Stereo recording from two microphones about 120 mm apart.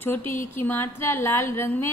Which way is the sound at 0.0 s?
15° left (ahead or behind).